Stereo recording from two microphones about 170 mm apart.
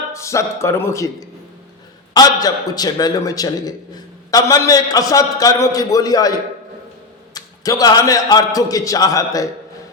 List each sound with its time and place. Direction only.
0.1 s a man's voice: 15° left (ahead or behind)
7.3 s a man's voice: 20° left (ahead or behind)